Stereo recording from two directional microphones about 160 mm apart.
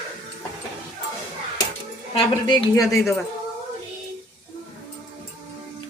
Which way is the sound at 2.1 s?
25° left (ahead or behind).